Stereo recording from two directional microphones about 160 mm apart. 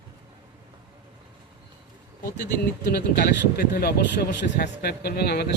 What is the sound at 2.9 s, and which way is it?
Speech, 65° left (ahead or behind).